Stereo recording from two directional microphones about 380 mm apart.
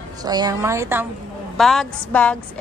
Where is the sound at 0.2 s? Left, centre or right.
Centre.